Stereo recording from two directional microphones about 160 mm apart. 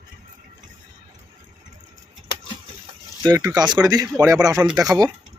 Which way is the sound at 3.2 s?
25° right (ahead or behind).